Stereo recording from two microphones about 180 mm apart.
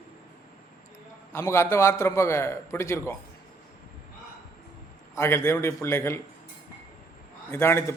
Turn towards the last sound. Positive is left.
turn(degrees=15)  # may be behind; listen again after turning